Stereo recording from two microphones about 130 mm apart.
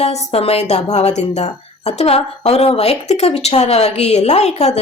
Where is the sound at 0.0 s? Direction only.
55° left (ahead or behind).